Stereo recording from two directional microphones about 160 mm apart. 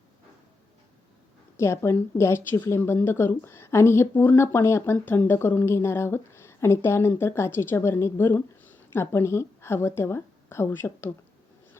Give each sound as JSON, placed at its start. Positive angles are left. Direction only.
{"t": 1.5, "sound": "speech", "side_deg": 15}